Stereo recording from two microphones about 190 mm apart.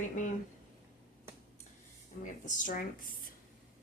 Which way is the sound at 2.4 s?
45° left (ahead or behind).